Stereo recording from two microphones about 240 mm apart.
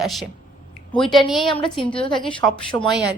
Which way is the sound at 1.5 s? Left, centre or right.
Centre.